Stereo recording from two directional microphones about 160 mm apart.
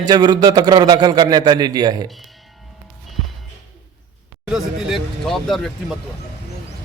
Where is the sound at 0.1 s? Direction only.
25° right (ahead or behind).